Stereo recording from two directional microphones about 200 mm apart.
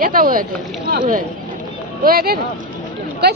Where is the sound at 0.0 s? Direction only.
45° right (ahead or behind).